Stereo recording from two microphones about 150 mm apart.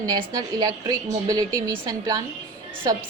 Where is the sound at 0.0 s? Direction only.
25° right (ahead or behind).